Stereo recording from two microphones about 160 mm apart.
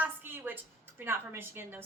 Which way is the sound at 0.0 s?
10° right (ahead or behind).